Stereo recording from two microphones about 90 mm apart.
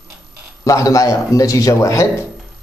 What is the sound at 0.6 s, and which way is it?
Speech, 40° left (ahead or behind).